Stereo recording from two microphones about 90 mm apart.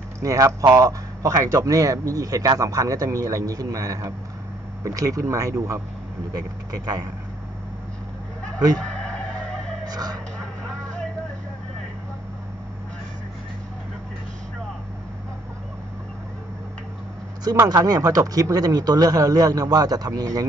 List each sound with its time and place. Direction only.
0.2 s a man's voice: 40° right (ahead or behind)
9.8 s music: 45° right (ahead or behind)
10.4 s vehicle: 10° left (ahead or behind)
17.6 s a man's voice: 45° right (ahead or behind)